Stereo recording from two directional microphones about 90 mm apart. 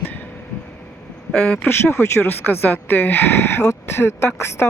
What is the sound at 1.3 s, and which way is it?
Speech, 15° left (ahead or behind).